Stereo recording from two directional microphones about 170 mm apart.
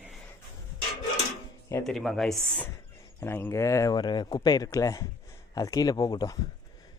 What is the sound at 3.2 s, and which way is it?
Speech, 15° left (ahead or behind).